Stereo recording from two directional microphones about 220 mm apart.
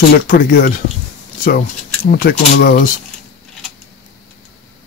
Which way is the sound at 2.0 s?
45° left (ahead or behind).